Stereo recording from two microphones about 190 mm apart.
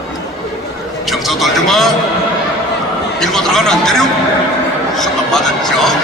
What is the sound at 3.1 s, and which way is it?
Speech, centre (ahead or behind).